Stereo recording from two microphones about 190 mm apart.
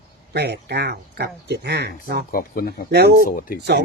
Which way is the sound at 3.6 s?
60° right (ahead or behind).